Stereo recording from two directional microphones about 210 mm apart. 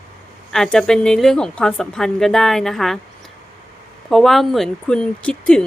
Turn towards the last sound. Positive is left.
turn(degrees=5)  # may be behind; listen again after turning